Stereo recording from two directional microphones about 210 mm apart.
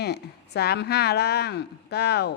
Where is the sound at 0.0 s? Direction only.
50° left (ahead or behind).